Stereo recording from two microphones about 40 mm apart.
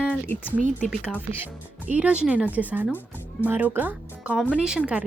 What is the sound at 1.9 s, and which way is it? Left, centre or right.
Speech, right.